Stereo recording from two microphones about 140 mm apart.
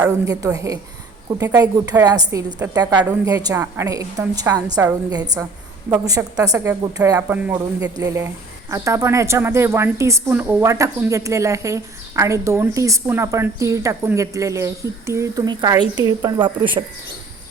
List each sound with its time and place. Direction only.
0.3 s a woman's voice: 25° right (ahead or behind)
7.2 s a woman's voice: 10° right (ahead or behind); by 16.8 s 35° right (ahead or behind)